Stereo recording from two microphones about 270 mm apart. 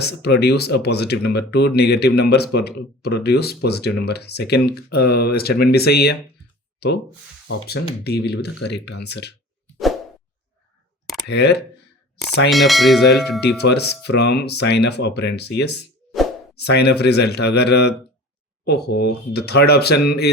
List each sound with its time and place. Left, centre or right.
0.0 s speech: left
11.3 s speech: left
12.5 s speech: centre
13.6 s speech: left